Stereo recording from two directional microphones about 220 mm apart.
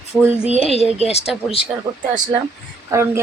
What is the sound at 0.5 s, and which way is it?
Speech, 25° left (ahead or behind).